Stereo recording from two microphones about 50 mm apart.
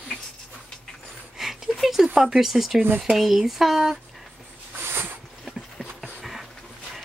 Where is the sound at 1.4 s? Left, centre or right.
Centre.